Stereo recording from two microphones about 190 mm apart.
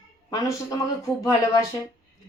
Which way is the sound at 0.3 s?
20° left (ahead or behind).